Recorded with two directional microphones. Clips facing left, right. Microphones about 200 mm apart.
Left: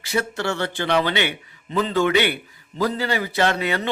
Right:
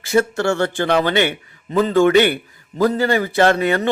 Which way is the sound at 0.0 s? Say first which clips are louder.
Right 7 dB; 50° right (ahead or behind).